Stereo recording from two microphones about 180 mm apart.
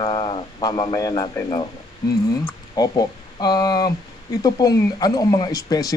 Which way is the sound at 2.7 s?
20° left (ahead or behind).